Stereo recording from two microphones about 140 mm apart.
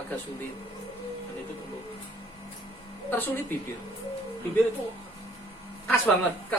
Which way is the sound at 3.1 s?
15° left (ahead or behind).